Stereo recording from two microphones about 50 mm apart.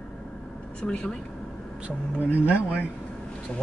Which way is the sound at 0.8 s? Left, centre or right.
Centre.